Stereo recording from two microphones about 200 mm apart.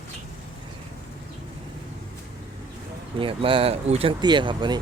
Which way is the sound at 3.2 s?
25° right (ahead or behind).